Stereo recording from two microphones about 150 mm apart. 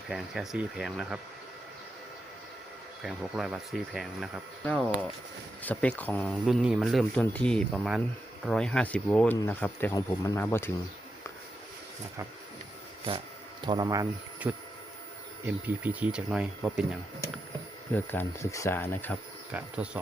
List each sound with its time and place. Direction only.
0.1 s speech: 5° right (ahead or behind)
3.0 s speech: 5° right (ahead or behind); by 9.9 s 10° left (ahead or behind)
9.9 s speech: 25° left (ahead or behind)
10.3 s speech: 15° left (ahead or behind)
13.7 s speech: 25° right (ahead or behind)
14.5 s speech: 10° right (ahead or behind)
17.9 s speech: 15° left (ahead or behind)
19.5 s speech: 5° right (ahead or behind)